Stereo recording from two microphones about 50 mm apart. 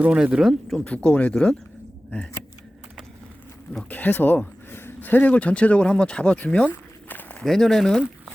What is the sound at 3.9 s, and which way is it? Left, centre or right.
Speech, left.